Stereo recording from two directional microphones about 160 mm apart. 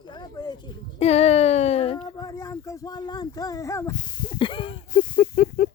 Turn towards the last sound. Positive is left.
turn(degrees=60)  # may be behind; listen again after turning